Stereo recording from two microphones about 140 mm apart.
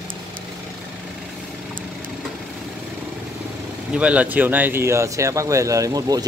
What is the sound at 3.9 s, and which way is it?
A man's voice, 10° right (ahead or behind).